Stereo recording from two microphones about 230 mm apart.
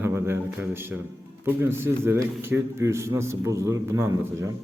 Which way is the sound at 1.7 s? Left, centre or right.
Centre.